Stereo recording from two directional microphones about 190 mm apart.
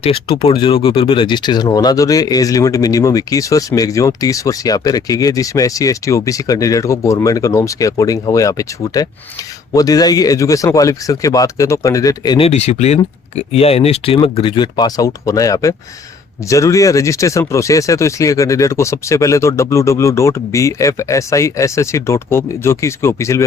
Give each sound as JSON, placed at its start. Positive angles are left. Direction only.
{"t": 0.0, "sound": "speech", "side_deg": 30}
{"t": 12.5, "sound": "speech", "side_deg": 35}